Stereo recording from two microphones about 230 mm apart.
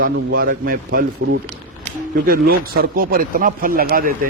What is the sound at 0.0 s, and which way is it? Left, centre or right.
Speech, right.